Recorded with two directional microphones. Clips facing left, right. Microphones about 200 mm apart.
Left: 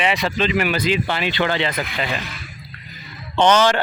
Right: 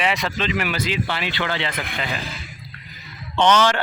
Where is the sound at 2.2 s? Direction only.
30° right (ahead or behind).